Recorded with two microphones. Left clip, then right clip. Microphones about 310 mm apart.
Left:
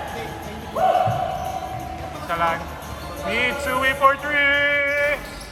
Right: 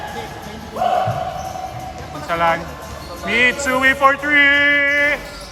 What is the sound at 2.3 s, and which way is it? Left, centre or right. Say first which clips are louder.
Speech: right 5 dB; right.